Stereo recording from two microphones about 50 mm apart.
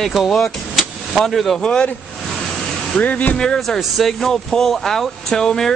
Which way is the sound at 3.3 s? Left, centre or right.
Centre.